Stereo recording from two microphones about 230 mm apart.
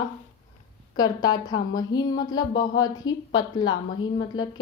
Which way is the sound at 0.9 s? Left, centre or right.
Centre.